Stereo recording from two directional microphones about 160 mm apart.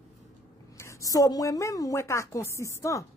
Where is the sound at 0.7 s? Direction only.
20° left (ahead or behind).